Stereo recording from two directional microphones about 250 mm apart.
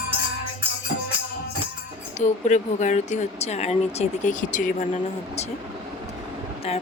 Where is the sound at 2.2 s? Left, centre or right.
Left.